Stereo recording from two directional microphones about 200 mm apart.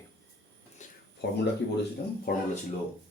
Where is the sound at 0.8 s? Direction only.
35° left (ahead or behind).